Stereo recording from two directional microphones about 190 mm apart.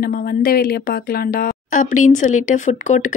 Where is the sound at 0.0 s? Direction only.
50° left (ahead or behind).